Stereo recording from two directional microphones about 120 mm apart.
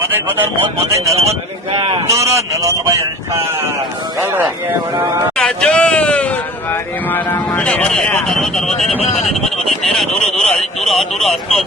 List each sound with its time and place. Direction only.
0.1 s speech: 20° right (ahead or behind)
1.1 s a man's voice: 60° right (ahead or behind)
2.0 s speech: 25° right (ahead or behind)
5.4 s a sound: 5° left (ahead or behind)
7.6 s speech: 10° left (ahead or behind)
9.0 s speech: 65° left (ahead or behind)
9.3 s a sound: centre (ahead or behind)
10.5 s speech: 5° left (ahead or behind)